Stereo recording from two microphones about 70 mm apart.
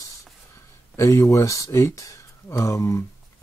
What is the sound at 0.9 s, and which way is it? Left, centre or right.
Speech, left.